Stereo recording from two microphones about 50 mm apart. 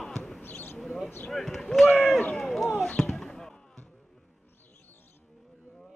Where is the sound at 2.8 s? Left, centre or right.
Centre.